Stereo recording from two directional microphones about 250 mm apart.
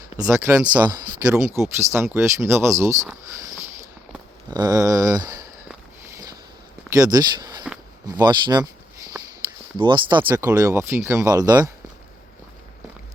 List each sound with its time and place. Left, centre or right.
0.2 s speech: centre
6.9 s speech: centre
9.7 s speech: centre